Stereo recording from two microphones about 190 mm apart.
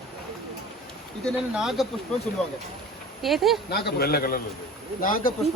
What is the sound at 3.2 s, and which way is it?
Speech, centre (ahead or behind).